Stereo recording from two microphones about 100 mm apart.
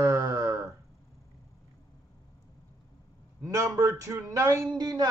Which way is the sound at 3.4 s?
35° right (ahead or behind).